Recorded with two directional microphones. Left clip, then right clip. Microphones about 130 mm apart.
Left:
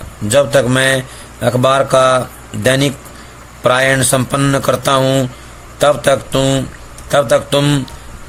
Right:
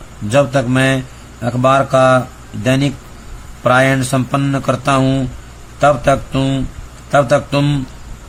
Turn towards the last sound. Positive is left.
turn(degrees=50)  # may be behind; listen again after turning